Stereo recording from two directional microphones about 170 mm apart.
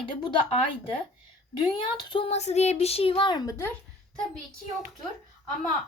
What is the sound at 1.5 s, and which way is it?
A woman's voice, 25° left (ahead or behind).